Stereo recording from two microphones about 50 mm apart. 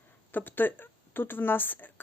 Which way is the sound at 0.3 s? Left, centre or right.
Left.